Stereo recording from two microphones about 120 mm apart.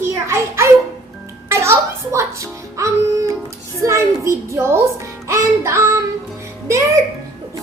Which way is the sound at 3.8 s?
25° right (ahead or behind).